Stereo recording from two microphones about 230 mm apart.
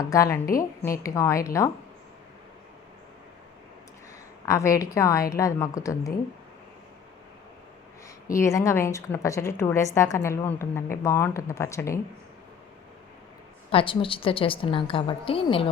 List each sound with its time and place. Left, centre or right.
0.0 s a woman's voice: centre
4.4 s a woman's voice: centre
8.3 s a woman's voice: centre
13.7 s a woman's voice: left